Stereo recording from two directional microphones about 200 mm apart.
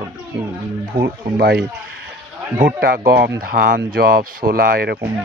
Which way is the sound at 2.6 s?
45° right (ahead or behind).